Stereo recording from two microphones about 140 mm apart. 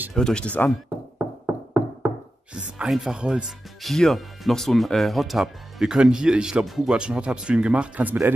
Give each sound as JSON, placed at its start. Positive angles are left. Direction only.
{"t": 0.1, "sound": "speech", "side_deg": 5}
{"t": 1.1, "sound": "knock", "side_deg": -15}
{"t": 2.5, "sound": "speech", "side_deg": -5}